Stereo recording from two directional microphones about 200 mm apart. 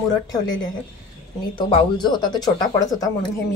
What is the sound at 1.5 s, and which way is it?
Speech, 25° left (ahead or behind).